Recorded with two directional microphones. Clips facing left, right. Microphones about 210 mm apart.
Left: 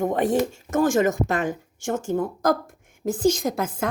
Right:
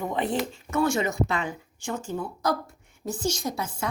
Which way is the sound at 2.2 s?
90° left.